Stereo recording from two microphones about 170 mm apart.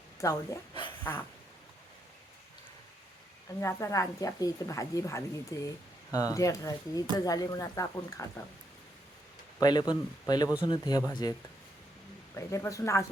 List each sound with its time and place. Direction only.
0.2 s speech: 20° left (ahead or behind)
0.7 s a sound: 30° left (ahead or behind)
3.6 s a woman's voice: 15° left (ahead or behind)
9.6 s a woman's voice: 25° left (ahead or behind)
12.4 s speech: 20° left (ahead or behind)